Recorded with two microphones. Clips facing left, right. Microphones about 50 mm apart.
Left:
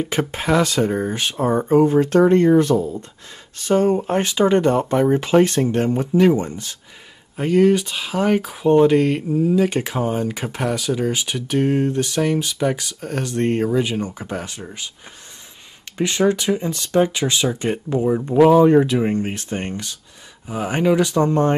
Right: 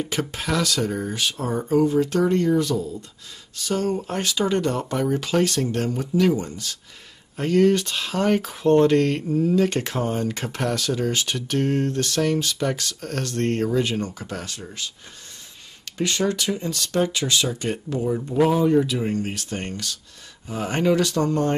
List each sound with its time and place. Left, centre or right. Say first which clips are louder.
0.0 s speech: left 5 dB; left
7.3 s speech: left 3 dB; centre
16.0 s speech: left 5 dB; left
18.6 s speech: left 6 dB; left